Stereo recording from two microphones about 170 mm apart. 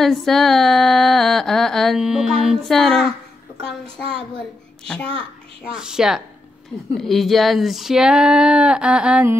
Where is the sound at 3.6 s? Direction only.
35° right (ahead or behind).